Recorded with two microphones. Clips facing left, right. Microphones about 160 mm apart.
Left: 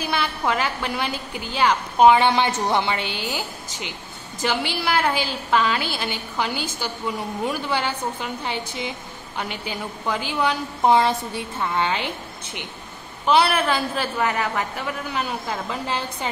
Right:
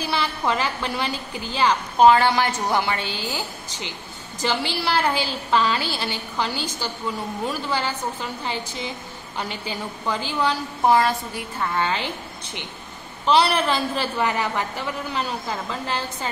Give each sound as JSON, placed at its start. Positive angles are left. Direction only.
{"t": 0.1, "sound": "a woman's voice", "side_deg": 10}
{"t": 13.2, "sound": "a woman's voice", "side_deg": 5}